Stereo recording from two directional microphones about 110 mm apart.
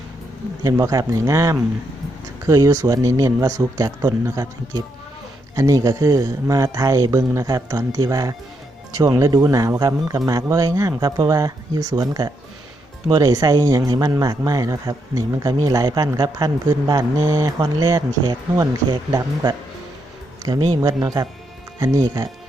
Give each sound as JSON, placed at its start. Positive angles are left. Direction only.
{"t": 0.6, "sound": "speech", "side_deg": -30}